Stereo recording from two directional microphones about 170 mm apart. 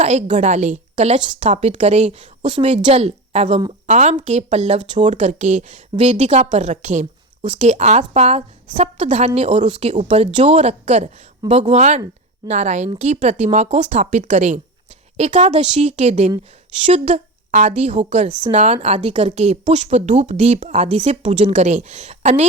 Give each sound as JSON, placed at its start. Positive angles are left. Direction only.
{"t": 0.0, "sound": "a woman's voice", "side_deg": -40}